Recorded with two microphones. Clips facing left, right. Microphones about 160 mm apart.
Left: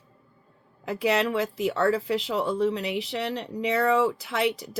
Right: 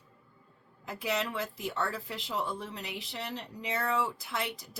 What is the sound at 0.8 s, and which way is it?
Speech, 70° left (ahead or behind).